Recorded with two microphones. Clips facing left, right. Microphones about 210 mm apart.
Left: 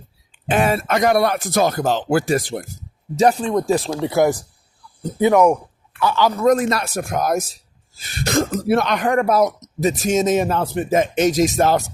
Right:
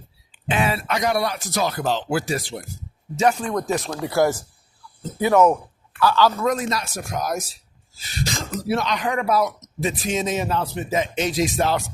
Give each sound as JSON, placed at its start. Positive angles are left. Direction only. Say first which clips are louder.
{"t": 0.4, "sound": "speech", "louder": "left 5 dB", "side_deg": 50}
{"t": 3.2, "sound": "speech", "louder": "left 4 dB", "side_deg": 35}
{"t": 6.4, "sound": "speech", "louder": "left 7 dB", "side_deg": 50}